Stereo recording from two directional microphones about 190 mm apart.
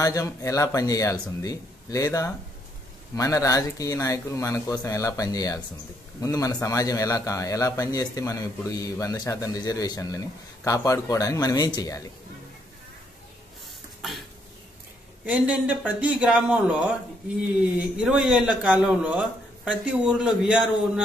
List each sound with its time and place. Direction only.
0.0 s a man's voice: 15° left (ahead or behind)
15.2 s speech: 5° right (ahead or behind)